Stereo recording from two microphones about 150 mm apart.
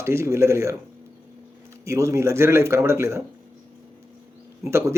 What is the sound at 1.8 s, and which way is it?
Speech, 20° right (ahead or behind).